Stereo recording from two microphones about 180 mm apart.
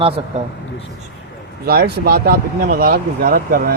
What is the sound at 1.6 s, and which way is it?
Speech, 60° right (ahead or behind).